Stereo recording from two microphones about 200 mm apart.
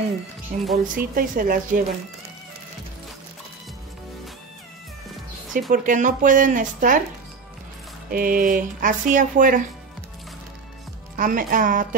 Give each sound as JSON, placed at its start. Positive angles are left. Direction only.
{"t": 0.5, "sound": "a woman's voice", "side_deg": -45}
{"t": 5.7, "sound": "speech", "side_deg": -40}
{"t": 8.1, "sound": "speech", "side_deg": -45}
{"t": 11.1, "sound": "a woman's voice", "side_deg": -45}